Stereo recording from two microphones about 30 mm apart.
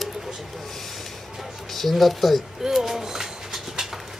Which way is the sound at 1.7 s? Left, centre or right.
Centre.